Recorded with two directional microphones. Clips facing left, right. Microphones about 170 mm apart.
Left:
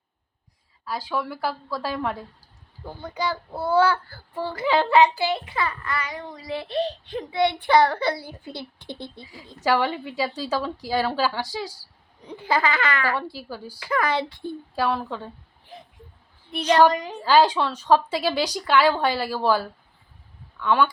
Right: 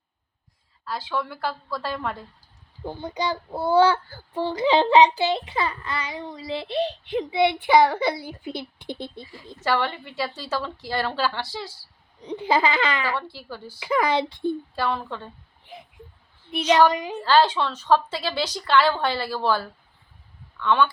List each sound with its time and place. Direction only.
0.9 s a woman's voice: 10° left (ahead or behind)
2.8 s a child's voice: 20° right (ahead or behind)
9.2 s a woman's voice: 15° left (ahead or behind)
12.2 s a child's voice: 20° right (ahead or behind)
13.1 s a woman's voice: 10° left (ahead or behind)
13.7 s a woman's voice: 15° right (ahead or behind)
14.8 s a woman's voice: 5° left (ahead or behind)
16.6 s a woman's voice: 10° right (ahead or behind)
17.2 s a woman's voice: 10° left (ahead or behind)